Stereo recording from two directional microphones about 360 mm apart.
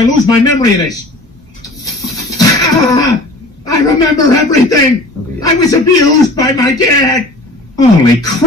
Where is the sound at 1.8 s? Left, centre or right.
Centre.